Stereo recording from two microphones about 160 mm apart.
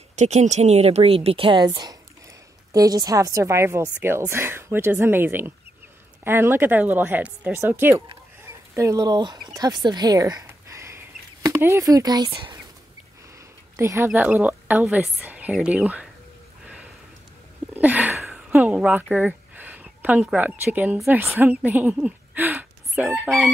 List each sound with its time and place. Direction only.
0.1 s a woman's voice: 45° right (ahead or behind); by 12.5 s 30° right (ahead or behind)
13.7 s a woman's voice: 15° right (ahead or behind)
16.6 s a sound: 10° right (ahead or behind)
17.7 s speech: 10° right (ahead or behind)